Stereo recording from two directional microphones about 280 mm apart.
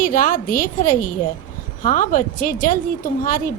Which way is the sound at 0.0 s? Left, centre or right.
Left.